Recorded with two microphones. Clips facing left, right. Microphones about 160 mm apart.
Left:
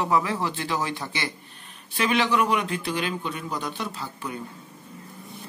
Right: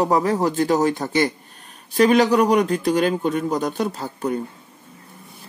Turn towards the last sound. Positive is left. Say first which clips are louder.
# right 9 dB
turn(degrees=-45)  # may be behind; listen again after turning